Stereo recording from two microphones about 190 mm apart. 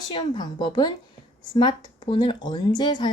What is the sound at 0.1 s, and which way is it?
Speech, 25° left (ahead or behind).